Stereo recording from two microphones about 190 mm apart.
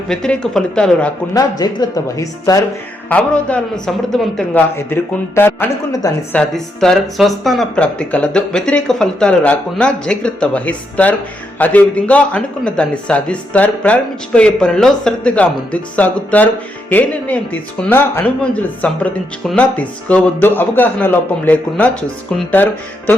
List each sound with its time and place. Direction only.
0.1 s speech: 5° left (ahead or behind)
1.3 s speech: 20° left (ahead or behind)
3.1 s a man's voice: 5° left (ahead or behind)
6.3 s a man's voice: 5° left (ahead or behind)